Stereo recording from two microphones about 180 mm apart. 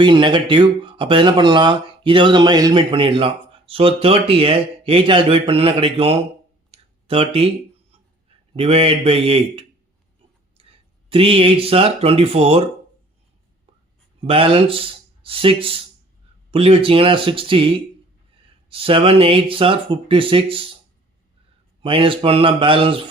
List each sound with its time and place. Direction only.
0.0 s speech: 25° right (ahead or behind)
6.7 s a sound: 30° right (ahead or behind)
8.5 s speech: 30° right (ahead or behind)
14.3 s speech: 30° right (ahead or behind)
21.8 s speech: 30° right (ahead or behind)